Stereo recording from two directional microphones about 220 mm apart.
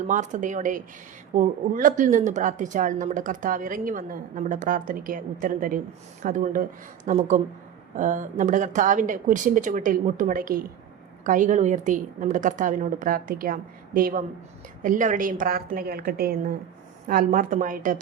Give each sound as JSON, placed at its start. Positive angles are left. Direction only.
{"t": 0.1, "sound": "speech", "side_deg": -35}